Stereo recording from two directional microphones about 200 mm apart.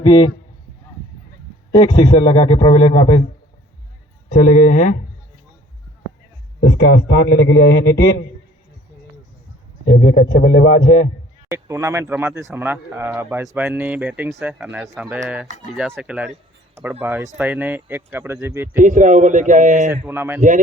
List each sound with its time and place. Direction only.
0.0 s a man's voice: 20° left (ahead or behind)
1.7 s a man's voice: 25° left (ahead or behind)
4.3 s speech: 40° left (ahead or behind)
6.6 s a man's voice: 55° left (ahead or behind)
9.9 s a man's voice: 55° left (ahead or behind)
11.4 s speech: 15° right (ahead or behind)
18.8 s a man's voice: 40° right (ahead or behind)
19.9 s speech: 10° right (ahead or behind)